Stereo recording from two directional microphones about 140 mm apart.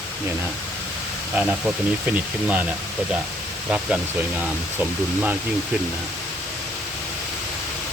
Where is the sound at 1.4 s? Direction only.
5° right (ahead or behind).